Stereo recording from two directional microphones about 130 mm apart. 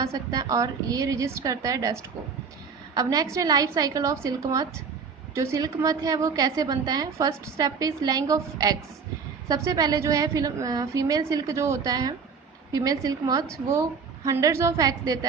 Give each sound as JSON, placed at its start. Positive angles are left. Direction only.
{"t": 0.0, "sound": "a woman's voice", "side_deg": -25}